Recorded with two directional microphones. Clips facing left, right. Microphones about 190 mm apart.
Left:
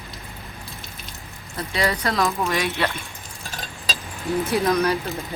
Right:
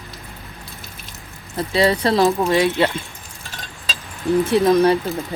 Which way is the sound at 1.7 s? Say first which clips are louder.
Right 7 dB; 30° right (ahead or behind).